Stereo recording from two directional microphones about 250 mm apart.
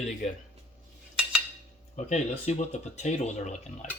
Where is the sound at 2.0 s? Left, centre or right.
Left.